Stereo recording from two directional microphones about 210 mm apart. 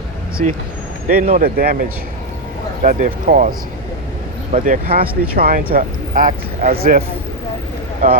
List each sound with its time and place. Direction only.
0.4 s speech: 35° right (ahead or behind)
4.5 s speech: 40° right (ahead or behind)